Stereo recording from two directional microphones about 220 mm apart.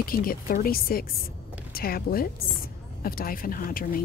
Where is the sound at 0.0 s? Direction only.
40° left (ahead or behind).